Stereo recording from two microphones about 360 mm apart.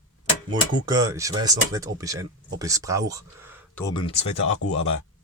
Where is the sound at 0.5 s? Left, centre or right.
Centre.